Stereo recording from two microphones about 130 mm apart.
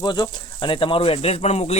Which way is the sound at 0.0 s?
35° left (ahead or behind).